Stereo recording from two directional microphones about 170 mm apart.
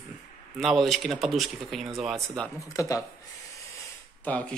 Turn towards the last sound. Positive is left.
turn(degrees=10)  # may be behind; listen again after turning